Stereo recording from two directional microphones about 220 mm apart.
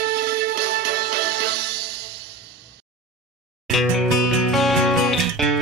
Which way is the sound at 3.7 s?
Centre (ahead or behind).